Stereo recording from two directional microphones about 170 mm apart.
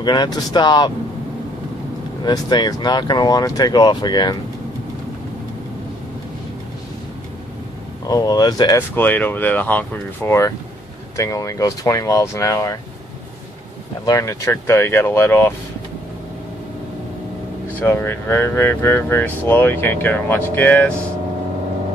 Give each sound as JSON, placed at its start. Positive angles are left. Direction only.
{"t": 0.0, "sound": "speech", "side_deg": 25}
{"t": 2.2, "sound": "speech", "side_deg": 25}
{"t": 8.1, "sound": "speech", "side_deg": 20}
{"t": 14.0, "sound": "speech", "side_deg": 20}
{"t": 17.7, "sound": "speech", "side_deg": 10}